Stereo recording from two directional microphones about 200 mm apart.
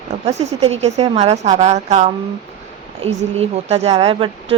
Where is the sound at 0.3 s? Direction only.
35° right (ahead or behind).